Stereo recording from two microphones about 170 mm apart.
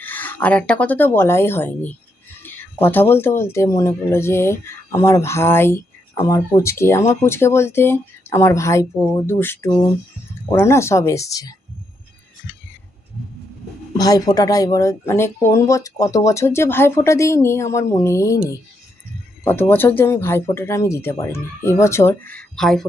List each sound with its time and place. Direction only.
0.0 s speech: 10° left (ahead or behind)
13.9 s speech: 20° left (ahead or behind); by 22.9 s centre (ahead or behind)